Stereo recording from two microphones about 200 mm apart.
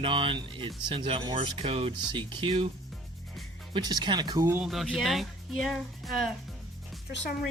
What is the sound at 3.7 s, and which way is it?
Speech, 20° right (ahead or behind).